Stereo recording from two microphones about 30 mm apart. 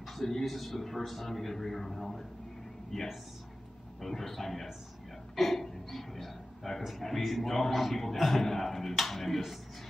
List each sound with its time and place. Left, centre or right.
0.0 s a man's voice: centre
5.3 s a sound: centre
7.2 s a man's voice: centre